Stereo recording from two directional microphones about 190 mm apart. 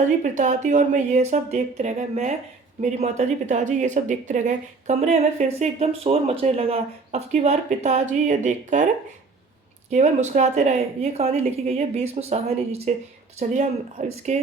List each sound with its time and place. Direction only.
0.0 s speech: 40° right (ahead or behind)
9.9 s speech: 35° right (ahead or behind)